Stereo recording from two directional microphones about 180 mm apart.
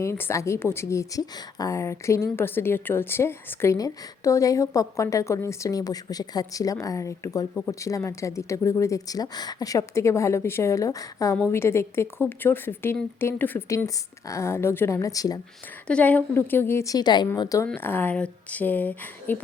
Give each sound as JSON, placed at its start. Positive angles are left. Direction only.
{"t": 0.0, "sound": "speech", "side_deg": 15}
{"t": 15.9, "sound": "speech", "side_deg": 5}